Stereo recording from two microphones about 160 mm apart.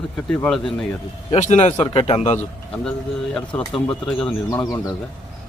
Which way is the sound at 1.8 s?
35° left (ahead or behind).